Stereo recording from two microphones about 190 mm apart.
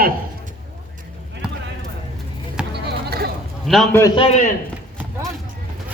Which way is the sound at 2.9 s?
55° right (ahead or behind).